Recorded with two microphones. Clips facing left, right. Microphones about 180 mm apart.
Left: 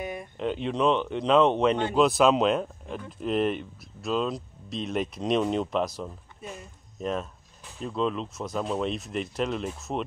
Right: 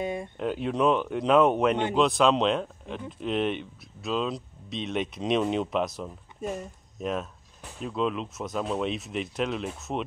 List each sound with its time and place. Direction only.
0.0 s a sound: 25° right (ahead or behind)
0.4 s speech: 5° right (ahead or behind)
6.4 s speech: 45° right (ahead or behind)
7.0 s speech: 5° right (ahead or behind)